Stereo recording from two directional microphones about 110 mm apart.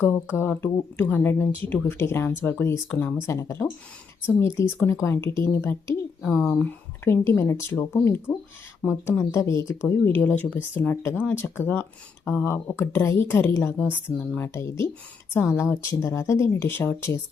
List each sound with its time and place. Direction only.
0.3 s speech: 20° left (ahead or behind)
10.2 s speech: 15° left (ahead or behind)